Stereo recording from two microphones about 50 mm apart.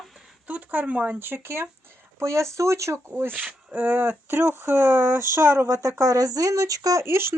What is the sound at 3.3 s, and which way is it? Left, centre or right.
Speech, right.